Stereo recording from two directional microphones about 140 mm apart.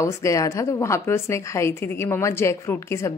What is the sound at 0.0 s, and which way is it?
A woman's voice, 20° left (ahead or behind).